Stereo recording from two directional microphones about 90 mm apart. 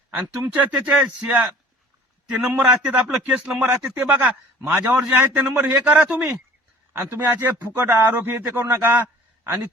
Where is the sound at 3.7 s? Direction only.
35° right (ahead or behind).